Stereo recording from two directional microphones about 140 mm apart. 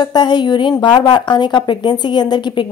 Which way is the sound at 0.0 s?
30° left (ahead or behind).